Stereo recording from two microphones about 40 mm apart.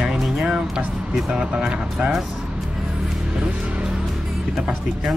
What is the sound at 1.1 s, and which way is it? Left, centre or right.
Speech, centre.